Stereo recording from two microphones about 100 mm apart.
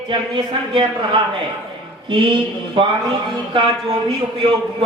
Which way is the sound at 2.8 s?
55° right (ahead or behind).